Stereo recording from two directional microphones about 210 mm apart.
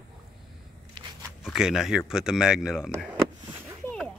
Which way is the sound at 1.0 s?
20° right (ahead or behind).